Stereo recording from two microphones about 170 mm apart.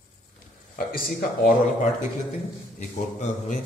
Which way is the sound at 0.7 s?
55° left (ahead or behind).